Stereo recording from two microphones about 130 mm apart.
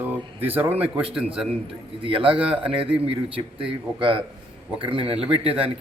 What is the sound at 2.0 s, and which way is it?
Speech, 40° right (ahead or behind).